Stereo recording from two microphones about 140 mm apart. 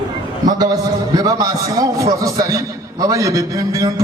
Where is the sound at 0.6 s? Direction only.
30° right (ahead or behind).